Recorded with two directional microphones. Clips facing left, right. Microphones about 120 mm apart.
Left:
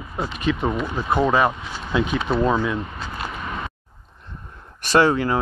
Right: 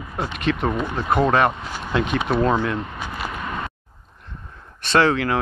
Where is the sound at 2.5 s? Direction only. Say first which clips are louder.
Even; centre (ahead or behind).